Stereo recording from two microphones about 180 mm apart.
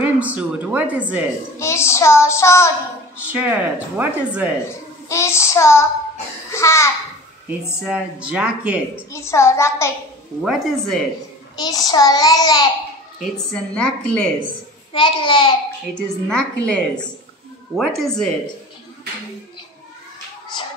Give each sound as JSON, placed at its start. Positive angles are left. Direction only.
{"t": 0.2, "sound": "speech", "side_deg": -10}
{"t": 1.6, "sound": "child singing", "side_deg": 15}
{"t": 3.2, "sound": "speech", "side_deg": -10}
{"t": 5.0, "sound": "child singing", "side_deg": 15}
{"t": 7.4, "sound": "speech", "side_deg": -5}
{"t": 9.1, "sound": "child singing", "side_deg": 15}
{"t": 10.4, "sound": "a woman's voice", "side_deg": 0}
{"t": 11.5, "sound": "a child's voice", "side_deg": 20}
{"t": 13.2, "sound": "a woman's voice", "side_deg": 5}
{"t": 14.9, "sound": "a child's voice", "side_deg": 25}
{"t": 15.9, "sound": "a woman's voice", "side_deg": 5}